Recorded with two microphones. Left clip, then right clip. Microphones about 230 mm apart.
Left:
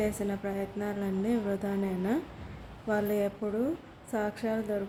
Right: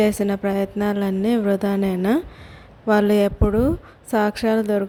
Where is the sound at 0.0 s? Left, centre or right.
Right.